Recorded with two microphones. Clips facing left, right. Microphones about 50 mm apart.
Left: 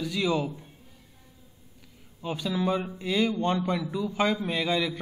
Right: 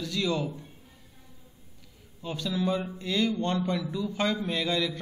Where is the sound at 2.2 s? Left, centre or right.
Centre.